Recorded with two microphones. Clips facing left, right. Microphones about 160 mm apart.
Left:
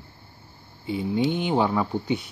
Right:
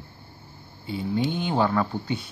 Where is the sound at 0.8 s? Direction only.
20° left (ahead or behind).